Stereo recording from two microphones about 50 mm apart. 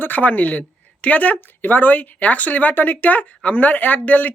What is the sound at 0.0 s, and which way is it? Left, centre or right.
Speech, left.